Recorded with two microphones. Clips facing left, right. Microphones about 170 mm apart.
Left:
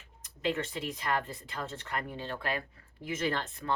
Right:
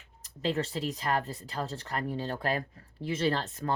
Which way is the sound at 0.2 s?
35° right (ahead or behind).